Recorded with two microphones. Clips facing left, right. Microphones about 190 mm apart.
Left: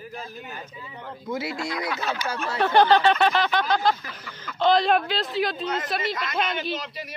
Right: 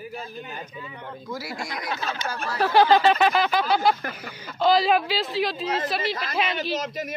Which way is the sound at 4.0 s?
55° right (ahead or behind).